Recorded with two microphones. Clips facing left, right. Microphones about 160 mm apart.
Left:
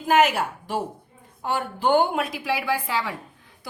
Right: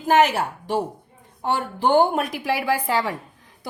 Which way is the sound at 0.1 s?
40° right (ahead or behind).